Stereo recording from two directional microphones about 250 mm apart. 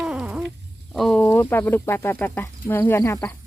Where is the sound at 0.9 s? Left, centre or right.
Centre.